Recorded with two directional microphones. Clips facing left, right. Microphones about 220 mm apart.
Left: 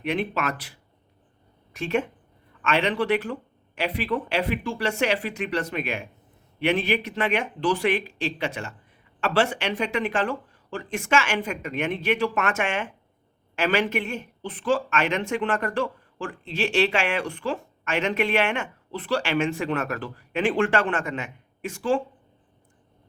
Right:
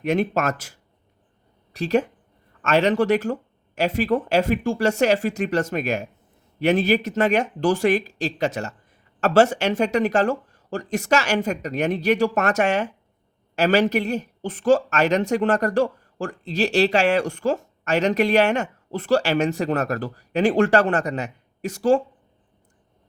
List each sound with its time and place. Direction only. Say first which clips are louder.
0.0 s a woman's voice: right 5 dB; 45° right (ahead or behind)